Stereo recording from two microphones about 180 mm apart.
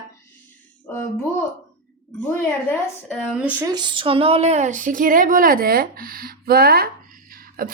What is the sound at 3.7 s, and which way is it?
Speech, 25° right (ahead or behind).